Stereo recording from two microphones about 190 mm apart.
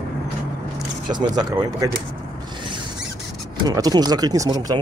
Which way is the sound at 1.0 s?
25° right (ahead or behind).